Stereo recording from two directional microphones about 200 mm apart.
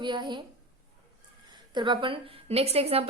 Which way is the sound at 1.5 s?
20° right (ahead or behind).